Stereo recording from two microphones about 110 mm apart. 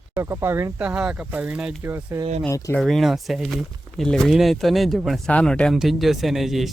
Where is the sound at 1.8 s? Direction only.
25° right (ahead or behind).